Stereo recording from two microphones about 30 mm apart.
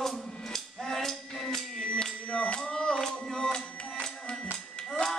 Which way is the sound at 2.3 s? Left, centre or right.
Left.